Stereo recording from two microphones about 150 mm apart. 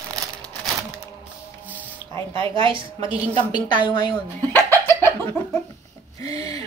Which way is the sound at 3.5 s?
30° left (ahead or behind).